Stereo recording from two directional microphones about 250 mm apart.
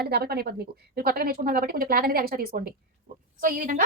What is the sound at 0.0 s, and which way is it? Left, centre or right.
A woman's voice, right.